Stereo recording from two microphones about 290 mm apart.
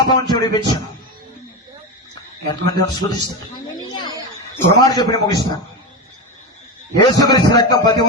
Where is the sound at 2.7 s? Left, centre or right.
Centre.